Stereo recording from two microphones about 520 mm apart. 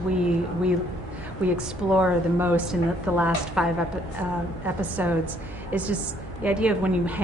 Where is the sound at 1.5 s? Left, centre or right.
Centre.